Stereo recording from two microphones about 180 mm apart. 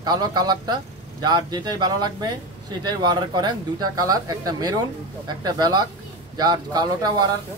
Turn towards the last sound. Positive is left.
turn(degrees=-20)  # may be behind; listen again after turning